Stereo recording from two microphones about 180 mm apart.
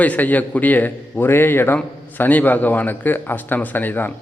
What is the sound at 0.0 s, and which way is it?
A man's voice, 10° left (ahead or behind).